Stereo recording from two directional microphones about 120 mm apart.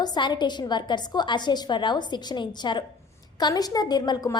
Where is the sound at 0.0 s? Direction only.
40° left (ahead or behind).